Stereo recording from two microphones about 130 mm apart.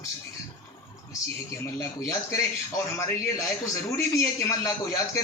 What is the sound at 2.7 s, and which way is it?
A man's voice, 25° left (ahead or behind).